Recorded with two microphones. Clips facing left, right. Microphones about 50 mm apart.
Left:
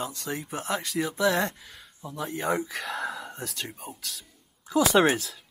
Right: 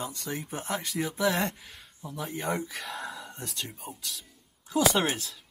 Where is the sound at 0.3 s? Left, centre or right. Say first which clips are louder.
Left 3 dB; left.